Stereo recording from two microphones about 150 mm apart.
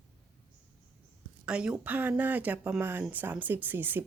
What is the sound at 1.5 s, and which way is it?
Speech, 5° right (ahead or behind).